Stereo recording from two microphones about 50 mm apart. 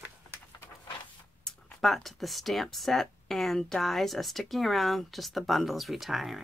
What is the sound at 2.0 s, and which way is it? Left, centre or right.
Speech, centre.